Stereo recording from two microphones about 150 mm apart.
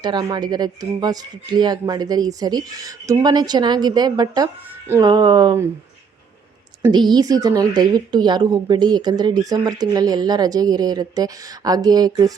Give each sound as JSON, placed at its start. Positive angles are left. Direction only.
{"t": 0.0, "sound": "a woman's voice", "side_deg": -30}
{"t": 6.9, "sound": "a woman's voice", "side_deg": -30}